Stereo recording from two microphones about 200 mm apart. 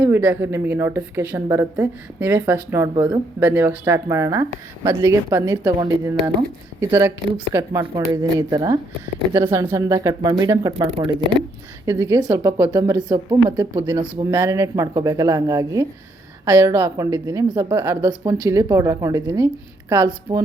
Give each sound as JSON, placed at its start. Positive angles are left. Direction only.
{"t": 0.0, "sound": "a woman's voice", "side_deg": -10}
{"t": 11.9, "sound": "a woman's voice", "side_deg": -15}